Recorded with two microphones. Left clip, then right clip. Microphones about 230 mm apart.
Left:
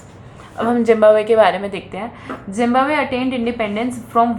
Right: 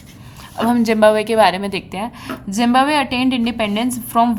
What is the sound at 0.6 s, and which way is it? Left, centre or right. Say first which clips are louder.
A woman's voice: left 1 dB; right.